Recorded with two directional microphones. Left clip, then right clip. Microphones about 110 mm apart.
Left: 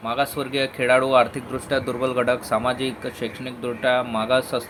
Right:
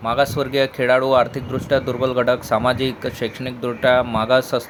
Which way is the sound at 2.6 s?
45° right (ahead or behind).